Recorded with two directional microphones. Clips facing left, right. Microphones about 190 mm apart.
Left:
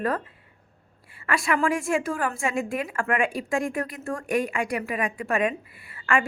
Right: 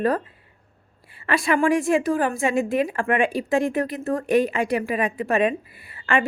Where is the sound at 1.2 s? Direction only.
25° right (ahead or behind).